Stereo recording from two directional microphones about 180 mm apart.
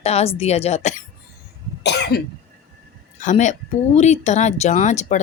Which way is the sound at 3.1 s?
45° left (ahead or behind).